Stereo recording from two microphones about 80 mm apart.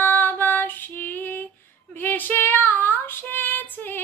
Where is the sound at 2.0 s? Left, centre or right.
Left.